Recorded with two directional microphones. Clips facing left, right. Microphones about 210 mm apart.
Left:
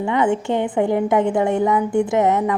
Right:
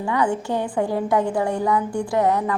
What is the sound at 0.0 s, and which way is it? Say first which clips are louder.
A woman's voice: left 3 dB; 20° left (ahead or behind).